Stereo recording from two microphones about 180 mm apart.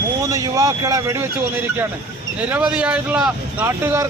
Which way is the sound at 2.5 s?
5° right (ahead or behind).